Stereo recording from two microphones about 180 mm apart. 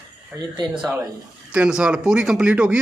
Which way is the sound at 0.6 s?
5° right (ahead or behind).